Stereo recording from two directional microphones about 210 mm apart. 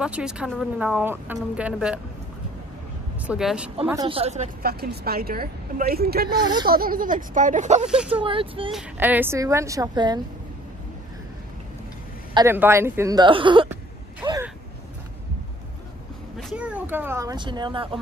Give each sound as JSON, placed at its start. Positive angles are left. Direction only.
{"t": 0.0, "sound": "a woman's voice", "side_deg": -5}
{"t": 3.2, "sound": "a woman's voice", "side_deg": -5}
{"t": 3.8, "sound": "speech", "side_deg": -15}
{"t": 4.1, "sound": "speech", "side_deg": -30}
{"t": 4.6, "sound": "a woman's voice", "side_deg": -50}
{"t": 6.3, "sound": "speech", "side_deg": -20}
{"t": 6.7, "sound": "speech", "side_deg": -45}
{"t": 8.7, "sound": "speech", "side_deg": -10}
{"t": 12.4, "sound": "speech", "side_deg": -10}
{"t": 14.2, "sound": "vehicle", "side_deg": -15}
{"t": 16.3, "sound": "speech", "side_deg": 0}